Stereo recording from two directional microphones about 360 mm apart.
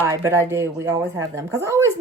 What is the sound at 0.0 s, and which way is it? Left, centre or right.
Speech, centre.